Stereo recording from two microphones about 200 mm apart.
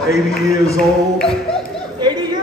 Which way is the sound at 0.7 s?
Centre (ahead or behind).